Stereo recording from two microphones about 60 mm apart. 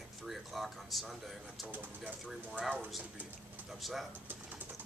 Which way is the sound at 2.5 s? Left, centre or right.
Centre.